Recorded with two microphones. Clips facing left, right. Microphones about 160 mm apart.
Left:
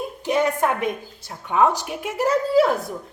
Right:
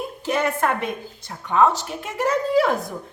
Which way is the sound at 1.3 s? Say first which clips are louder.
Right 1 dB; 10° left (ahead or behind).